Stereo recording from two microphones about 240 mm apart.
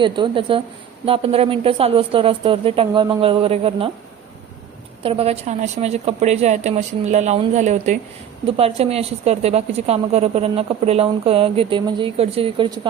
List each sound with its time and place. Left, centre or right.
0.0 s a woman's voice: right
5.0 s a woman's voice: right